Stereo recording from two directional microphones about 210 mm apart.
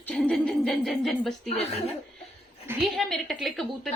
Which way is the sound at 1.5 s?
30° left (ahead or behind).